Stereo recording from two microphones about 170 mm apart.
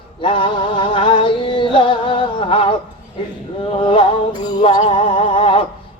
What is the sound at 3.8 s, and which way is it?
Music, 30° left (ahead or behind).